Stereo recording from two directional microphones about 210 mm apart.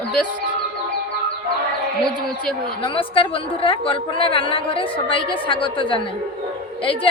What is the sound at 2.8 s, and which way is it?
A woman's voice, 25° left (ahead or behind).